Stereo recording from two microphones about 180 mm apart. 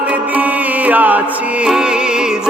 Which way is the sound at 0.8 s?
10° right (ahead or behind).